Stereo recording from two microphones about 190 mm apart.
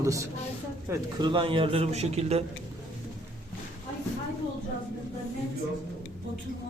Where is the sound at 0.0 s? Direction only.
15° right (ahead or behind).